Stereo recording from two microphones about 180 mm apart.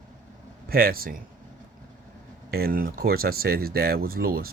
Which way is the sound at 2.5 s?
55° right (ahead or behind).